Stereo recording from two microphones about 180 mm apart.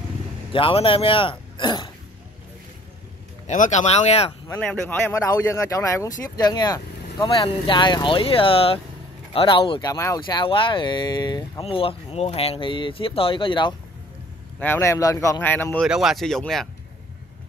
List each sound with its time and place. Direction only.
0.5 s speech: 30° left (ahead or behind)
3.4 s speech: 45° left (ahead or behind)
4.6 s speech: 10° left (ahead or behind); by 13.7 s 25° left (ahead or behind)
14.6 s speech: 15° left (ahead or behind)
15.8 s speech: centre (ahead or behind)